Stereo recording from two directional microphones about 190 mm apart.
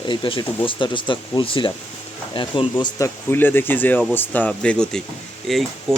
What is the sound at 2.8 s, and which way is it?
Speech, 15° left (ahead or behind).